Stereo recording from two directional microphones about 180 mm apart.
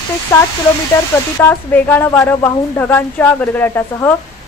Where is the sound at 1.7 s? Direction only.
10° left (ahead or behind).